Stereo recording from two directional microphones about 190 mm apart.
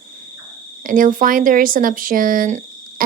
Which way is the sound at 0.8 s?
45° right (ahead or behind).